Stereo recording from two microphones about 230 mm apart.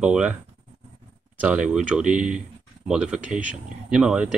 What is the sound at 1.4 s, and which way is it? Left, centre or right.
Speech, centre.